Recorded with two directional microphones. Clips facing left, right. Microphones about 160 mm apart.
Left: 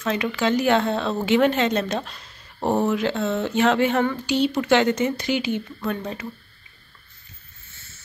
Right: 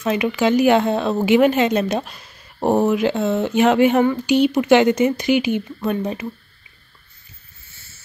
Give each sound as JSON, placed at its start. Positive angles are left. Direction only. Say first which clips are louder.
{"t": 0.0, "sound": "speech", "louder": "right 5 dB", "side_deg": -15}